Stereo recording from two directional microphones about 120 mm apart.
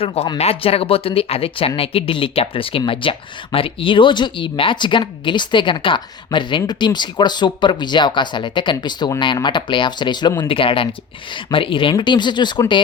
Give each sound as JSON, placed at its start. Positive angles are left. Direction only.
{"t": 0.0, "sound": "speech", "side_deg": 55}